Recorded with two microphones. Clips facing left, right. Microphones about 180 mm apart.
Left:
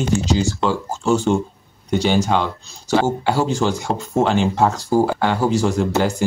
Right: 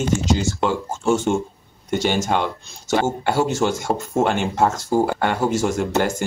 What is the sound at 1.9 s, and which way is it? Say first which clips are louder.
Speech: left 3 dB; 45° right (ahead or behind).